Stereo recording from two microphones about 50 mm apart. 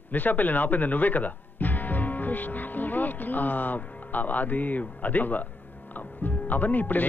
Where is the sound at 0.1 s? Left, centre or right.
Left.